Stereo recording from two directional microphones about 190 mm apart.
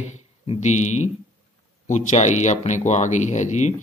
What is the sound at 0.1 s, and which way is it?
Speech, 35° left (ahead or behind).